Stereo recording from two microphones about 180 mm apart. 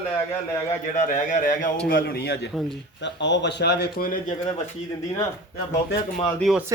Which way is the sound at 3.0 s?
80° left.